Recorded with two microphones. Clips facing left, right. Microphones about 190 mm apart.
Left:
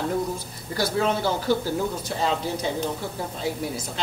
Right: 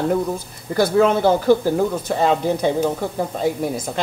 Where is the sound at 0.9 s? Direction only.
55° right (ahead or behind).